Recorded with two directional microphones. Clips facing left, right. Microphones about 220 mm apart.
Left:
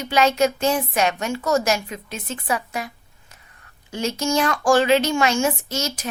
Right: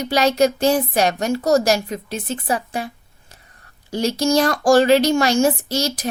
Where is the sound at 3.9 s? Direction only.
35° right (ahead or behind).